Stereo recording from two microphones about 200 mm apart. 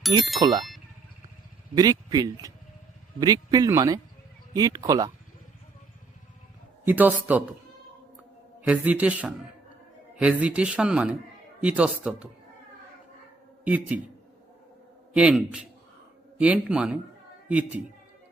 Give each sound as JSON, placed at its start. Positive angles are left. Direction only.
{"t": 0.1, "sound": "speech", "side_deg": -20}
{"t": 1.7, "sound": "speech", "side_deg": -20}
{"t": 6.8, "sound": "a man's voice", "side_deg": -10}
{"t": 8.6, "sound": "a man's voice", "side_deg": -5}
{"t": 13.7, "sound": "a man's voice", "side_deg": -5}
{"t": 15.1, "sound": "a man's voice", "side_deg": -5}